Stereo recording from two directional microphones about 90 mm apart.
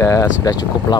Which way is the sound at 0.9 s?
50° left (ahead or behind).